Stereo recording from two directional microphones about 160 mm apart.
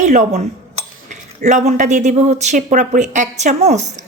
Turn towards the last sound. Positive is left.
turn(degrees=-45)  # may be behind; listen again after turning